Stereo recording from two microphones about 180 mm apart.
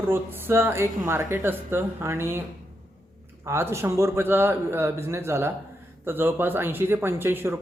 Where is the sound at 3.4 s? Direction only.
15° right (ahead or behind).